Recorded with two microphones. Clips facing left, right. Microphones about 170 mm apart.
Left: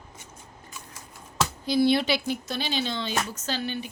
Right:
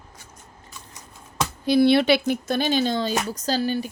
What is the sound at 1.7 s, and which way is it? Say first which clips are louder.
A woman's voice: right 6 dB; 65° right (ahead or behind).